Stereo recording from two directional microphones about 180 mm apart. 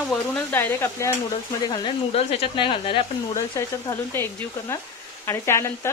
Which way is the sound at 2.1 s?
35° left (ahead or behind).